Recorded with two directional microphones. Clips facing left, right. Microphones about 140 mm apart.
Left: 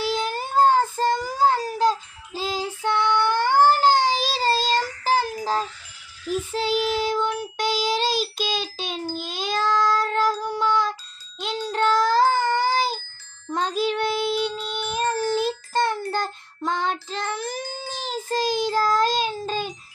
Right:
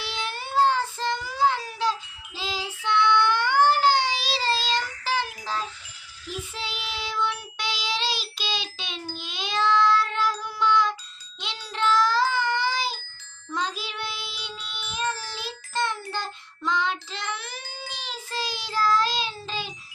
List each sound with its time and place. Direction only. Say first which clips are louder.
0.0 s child singing: left 8 dB; 40° left (ahead or behind)
11.3 s music: left 7 dB; 40° left (ahead or behind)
13.5 s child singing: left 7 dB; 45° left (ahead or behind)